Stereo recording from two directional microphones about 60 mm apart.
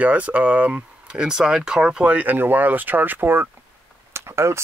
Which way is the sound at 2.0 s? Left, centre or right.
Right.